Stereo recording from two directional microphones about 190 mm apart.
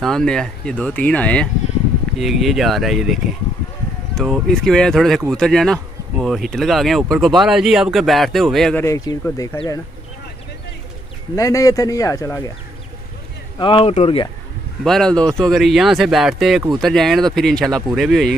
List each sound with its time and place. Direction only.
0.0 s speech: 5° left (ahead or behind)
8.8 s speech: 15° left (ahead or behind)
11.3 s speech: 15° left (ahead or behind)
13.6 s speech: 25° left (ahead or behind)
14.8 s speech: centre (ahead or behind)